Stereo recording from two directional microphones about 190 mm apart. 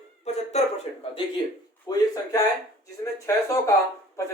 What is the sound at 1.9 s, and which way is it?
Speech, 20° left (ahead or behind).